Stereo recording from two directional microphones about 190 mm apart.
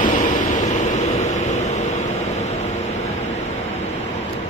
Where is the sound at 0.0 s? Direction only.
45° left (ahead or behind).